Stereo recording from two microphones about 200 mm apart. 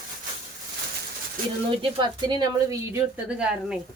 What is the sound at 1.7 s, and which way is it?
Speech, 25° right (ahead or behind).